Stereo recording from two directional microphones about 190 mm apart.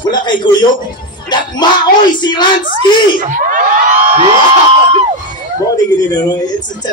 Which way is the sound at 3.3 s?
45° right (ahead or behind).